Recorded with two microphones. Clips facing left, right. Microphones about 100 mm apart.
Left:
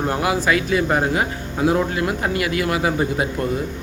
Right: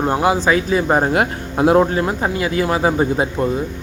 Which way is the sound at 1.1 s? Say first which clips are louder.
Right 4 dB; 55° right (ahead or behind).